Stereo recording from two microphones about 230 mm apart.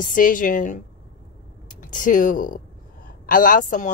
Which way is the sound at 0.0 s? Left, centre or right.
Left.